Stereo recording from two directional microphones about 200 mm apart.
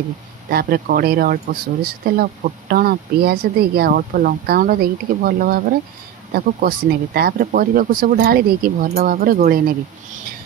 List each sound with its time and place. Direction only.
0.5 s speech: 50° right (ahead or behind)